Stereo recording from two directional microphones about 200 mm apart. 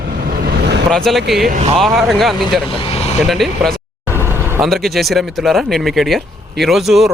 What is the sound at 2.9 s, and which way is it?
Vehicle, 30° left (ahead or behind).